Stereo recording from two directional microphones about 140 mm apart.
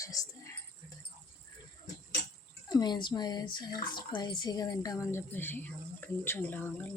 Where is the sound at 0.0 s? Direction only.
25° left (ahead or behind).